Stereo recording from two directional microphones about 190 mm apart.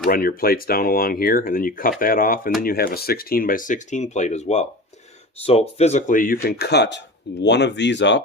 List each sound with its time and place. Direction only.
0.1 s speech: 50° left (ahead or behind); by 8.2 s 70° left (ahead or behind)